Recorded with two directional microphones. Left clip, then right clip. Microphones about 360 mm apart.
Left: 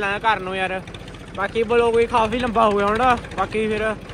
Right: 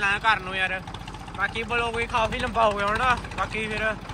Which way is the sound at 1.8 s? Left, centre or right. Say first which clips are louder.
Left 7 dB; centre.